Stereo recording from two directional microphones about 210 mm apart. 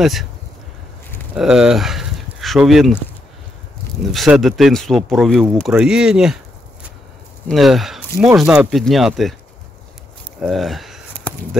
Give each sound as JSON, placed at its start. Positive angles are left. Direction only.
{"t": 0.0, "sound": "speech", "side_deg": 0}
{"t": 1.3, "sound": "speech", "side_deg": -5}
{"t": 4.0, "sound": "speech", "side_deg": 0}
{"t": 7.4, "sound": "speech", "side_deg": 0}
{"t": 10.4, "sound": "a sound", "side_deg": 0}